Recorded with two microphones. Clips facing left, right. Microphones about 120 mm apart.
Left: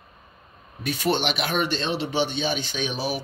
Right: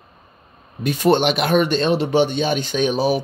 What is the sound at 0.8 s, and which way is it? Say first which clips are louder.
Speech: right 8 dB; 45° right (ahead or behind).